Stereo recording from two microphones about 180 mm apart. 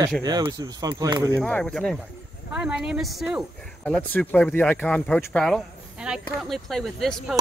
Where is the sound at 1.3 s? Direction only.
5° left (ahead or behind).